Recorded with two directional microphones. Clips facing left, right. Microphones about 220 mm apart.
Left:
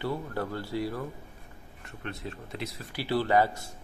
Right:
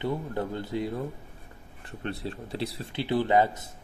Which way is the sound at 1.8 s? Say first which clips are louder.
Right 4 dB; 30° right (ahead or behind).